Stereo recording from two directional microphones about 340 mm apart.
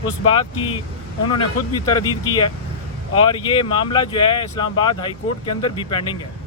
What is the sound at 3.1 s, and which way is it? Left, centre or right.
Speech, centre.